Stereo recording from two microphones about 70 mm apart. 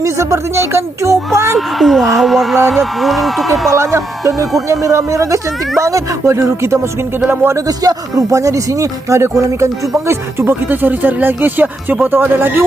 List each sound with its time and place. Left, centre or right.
0.0 s speech: right
1.5 s speech: centre
3.8 s speech: right
7.7 s speech: right
10.1 s speech: right